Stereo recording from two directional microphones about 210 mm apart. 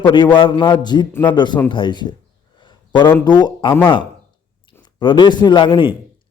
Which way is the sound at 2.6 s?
20° left (ahead or behind).